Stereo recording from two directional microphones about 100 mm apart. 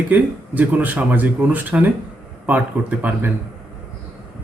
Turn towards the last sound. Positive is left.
turn(degrees=-15)  # may be behind; listen again after turning